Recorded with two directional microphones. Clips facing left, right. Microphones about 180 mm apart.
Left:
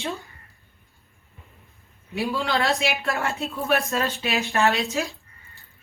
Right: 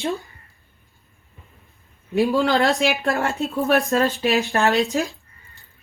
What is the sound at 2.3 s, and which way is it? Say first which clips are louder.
Speech: right 3 dB; 40° right (ahead or behind).